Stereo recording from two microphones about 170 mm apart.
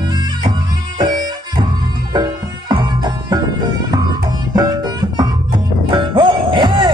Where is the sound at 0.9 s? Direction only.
25° right (ahead or behind).